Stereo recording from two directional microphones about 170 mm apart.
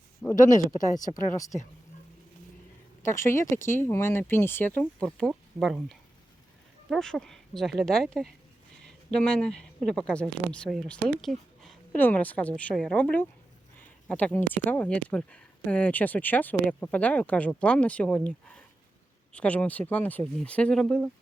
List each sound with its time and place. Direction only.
0.3 s speech: 50° left (ahead or behind)
0.9 s speech: 20° left (ahead or behind)
3.0 s speech: 15° left (ahead or behind)